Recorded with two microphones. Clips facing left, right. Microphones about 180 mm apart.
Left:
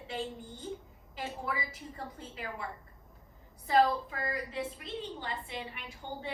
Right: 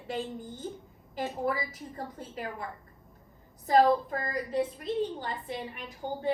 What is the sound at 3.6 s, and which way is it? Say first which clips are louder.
A woman's voice: right 4 dB; 45° right (ahead or behind).